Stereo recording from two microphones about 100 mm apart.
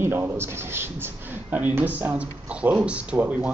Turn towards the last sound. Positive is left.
turn(degrees=-15)  # may be behind; listen again after turning